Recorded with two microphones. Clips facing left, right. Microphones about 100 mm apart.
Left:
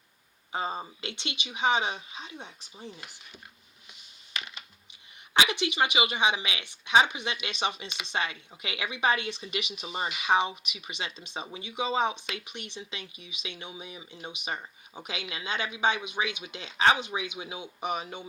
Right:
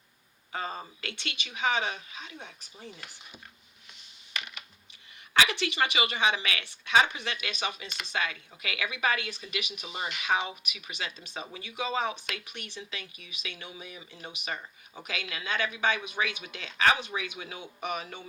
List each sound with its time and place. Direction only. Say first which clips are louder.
0.5 s speech: left 3 dB; 20° left (ahead or behind)
5.3 s speech: even; 20° left (ahead or behind)